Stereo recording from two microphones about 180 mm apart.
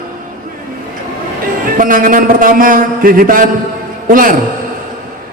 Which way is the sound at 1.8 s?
50° right (ahead or behind).